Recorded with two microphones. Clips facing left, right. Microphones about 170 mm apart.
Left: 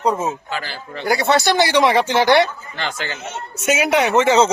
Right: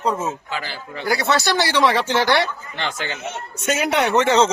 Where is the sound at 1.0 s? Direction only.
20° left (ahead or behind).